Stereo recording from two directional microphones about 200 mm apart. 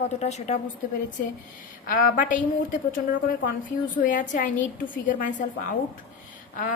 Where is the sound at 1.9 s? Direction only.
40° left (ahead or behind).